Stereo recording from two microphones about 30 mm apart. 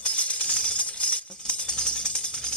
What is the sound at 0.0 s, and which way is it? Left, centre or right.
Tambourine, left.